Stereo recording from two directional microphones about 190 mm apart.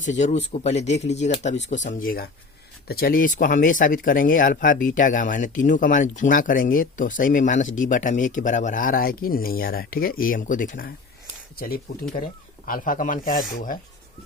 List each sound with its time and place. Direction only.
0.0 s speech: 40° left (ahead or behind)